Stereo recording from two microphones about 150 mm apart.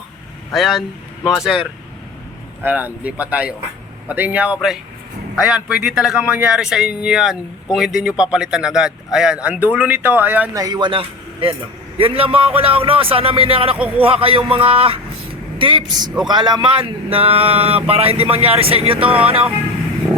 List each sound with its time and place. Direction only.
0.5 s speech: centre (ahead or behind)
2.6 s speech: 10° right (ahead or behind)
10.5 s speech: 25° right (ahead or behind)
13.7 s speech: 10° right (ahead or behind)
14.0 s speech: 40° right (ahead or behind)